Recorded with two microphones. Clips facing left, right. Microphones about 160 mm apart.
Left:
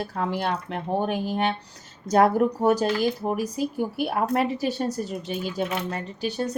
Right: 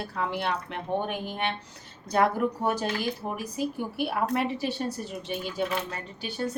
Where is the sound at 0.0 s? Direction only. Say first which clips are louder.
Left 3 dB; 40° left (ahead or behind).